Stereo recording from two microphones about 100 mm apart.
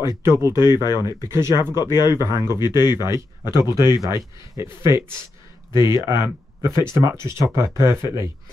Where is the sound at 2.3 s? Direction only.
40° left (ahead or behind).